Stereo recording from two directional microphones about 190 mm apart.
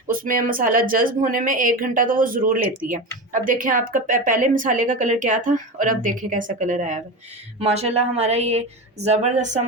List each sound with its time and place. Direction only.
0.1 s speech: 45° right (ahead or behind)